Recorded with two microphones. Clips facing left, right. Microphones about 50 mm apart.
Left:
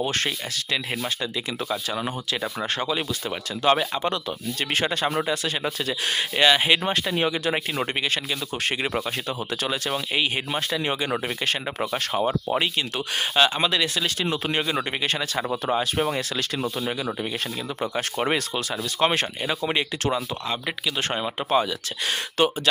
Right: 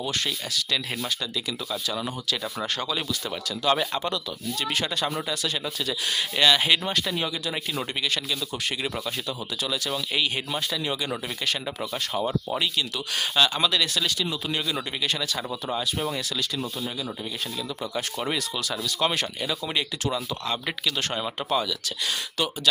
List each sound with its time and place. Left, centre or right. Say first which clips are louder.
0.0 s speech: left 3 dB; left
3.6 s speech: left 3 dB; left
6.3 s speech: left 2 dB; left
14.2 s speech: left 4 dB; left
17.9 s speech: left 4 dB; left
20.1 s speech: left 1 dB; centre
21.5 s speech: left 4 dB; left